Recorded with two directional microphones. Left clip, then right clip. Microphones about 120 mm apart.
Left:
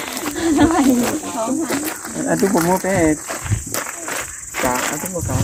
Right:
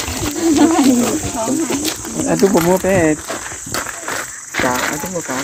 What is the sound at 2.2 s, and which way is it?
Speech, 20° right (ahead or behind).